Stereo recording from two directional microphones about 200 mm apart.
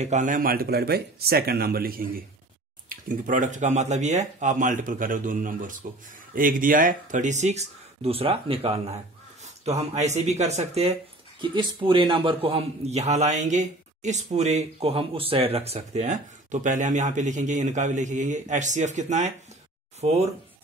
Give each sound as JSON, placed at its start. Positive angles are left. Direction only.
{"t": 0.0, "sound": "a man's voice", "side_deg": -35}